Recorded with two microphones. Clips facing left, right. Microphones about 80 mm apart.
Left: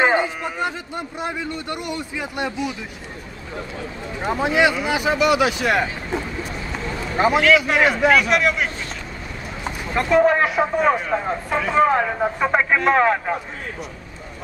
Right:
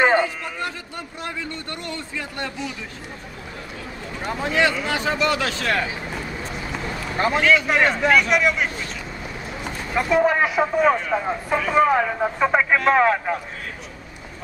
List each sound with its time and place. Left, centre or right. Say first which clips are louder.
0.0 s a man's voice: even; centre
4.2 s speech: left 3 dB; centre
7.0 s a sound: left 4 dB; centre
7.5 s speech: left 2 dB; centre
9.9 s speech: left 2 dB; centre